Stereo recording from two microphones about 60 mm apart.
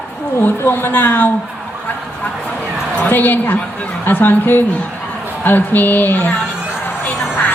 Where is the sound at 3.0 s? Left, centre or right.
Left.